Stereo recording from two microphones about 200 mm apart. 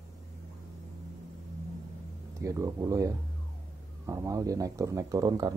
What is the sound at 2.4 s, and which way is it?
Speech, 15° right (ahead or behind).